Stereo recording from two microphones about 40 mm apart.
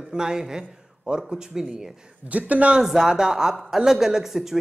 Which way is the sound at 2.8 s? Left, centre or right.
Centre.